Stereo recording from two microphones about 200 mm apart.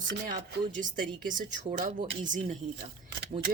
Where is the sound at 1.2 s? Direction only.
40° right (ahead or behind).